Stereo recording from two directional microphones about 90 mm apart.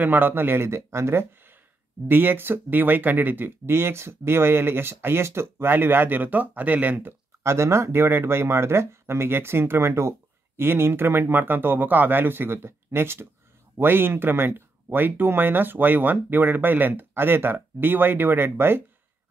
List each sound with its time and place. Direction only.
0.0 s speech: 20° right (ahead or behind)